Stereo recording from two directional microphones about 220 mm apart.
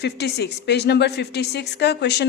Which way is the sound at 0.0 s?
50° left (ahead or behind).